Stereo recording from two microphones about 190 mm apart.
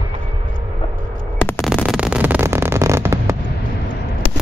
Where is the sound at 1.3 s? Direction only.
10° left (ahead or behind).